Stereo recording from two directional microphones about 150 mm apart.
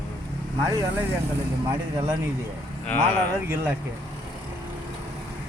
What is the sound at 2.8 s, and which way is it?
Speech, 10° left (ahead or behind).